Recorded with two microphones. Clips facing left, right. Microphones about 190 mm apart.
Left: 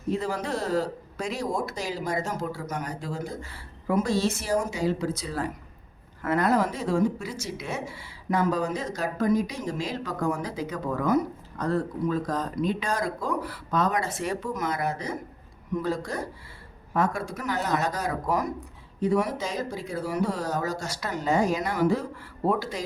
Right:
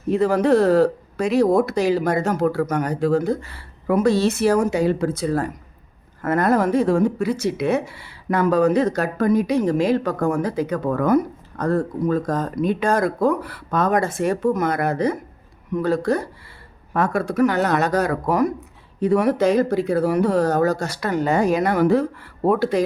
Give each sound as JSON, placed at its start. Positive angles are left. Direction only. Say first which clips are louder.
{"t": 0.1, "sound": "speech", "louder": "right 12 dB", "side_deg": -60}